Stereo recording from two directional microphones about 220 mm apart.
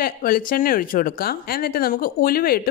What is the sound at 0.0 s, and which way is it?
Speech, 40° left (ahead or behind).